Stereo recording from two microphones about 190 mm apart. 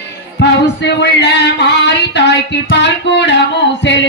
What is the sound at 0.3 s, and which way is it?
Singing, 65° left (ahead or behind).